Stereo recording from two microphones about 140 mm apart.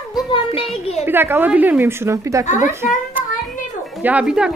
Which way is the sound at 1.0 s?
15° right (ahead or behind).